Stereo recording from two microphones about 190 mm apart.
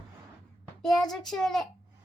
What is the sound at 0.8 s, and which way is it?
Speech, centre (ahead or behind).